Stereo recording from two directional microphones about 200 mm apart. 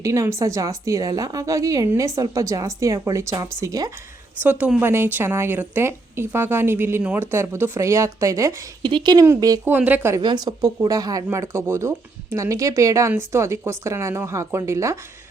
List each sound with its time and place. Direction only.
0.0 s a woman's voice: 15° right (ahead or behind)
4.4 s a woman's voice: 5° right (ahead or behind)
10.2 s a woman's voice: 20° right (ahead or behind)